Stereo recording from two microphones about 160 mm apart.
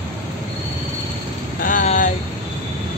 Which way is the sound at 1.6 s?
55° left (ahead or behind).